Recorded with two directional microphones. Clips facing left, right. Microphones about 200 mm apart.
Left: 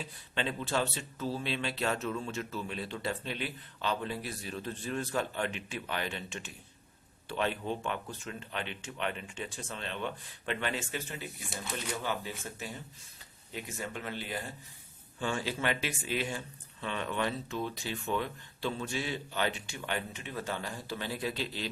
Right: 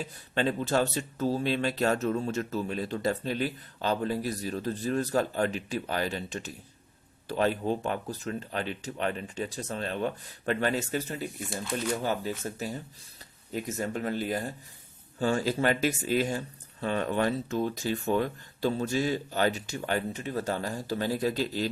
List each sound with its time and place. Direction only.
0.0 s speech: 40° right (ahead or behind)